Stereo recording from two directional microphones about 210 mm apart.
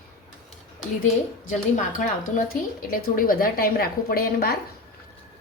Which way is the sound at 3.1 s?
40° left (ahead or behind).